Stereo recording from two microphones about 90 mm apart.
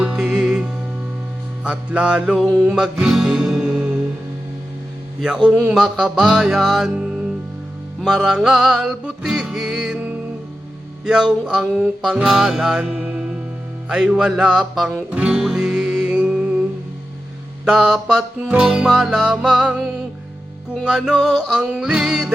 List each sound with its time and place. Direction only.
0.0 s music: 10° right (ahead or behind)
5.5 s speech: 20° right (ahead or behind)
5.7 s music: 5° right (ahead or behind)
11.0 s music: 10° right (ahead or behind)
12.9 s music: 15° right (ahead or behind)
17.7 s music: 5° right (ahead or behind)